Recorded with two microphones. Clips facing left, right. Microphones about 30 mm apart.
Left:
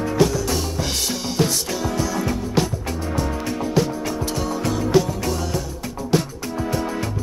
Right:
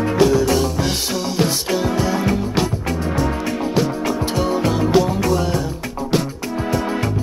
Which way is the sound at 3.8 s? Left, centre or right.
Right.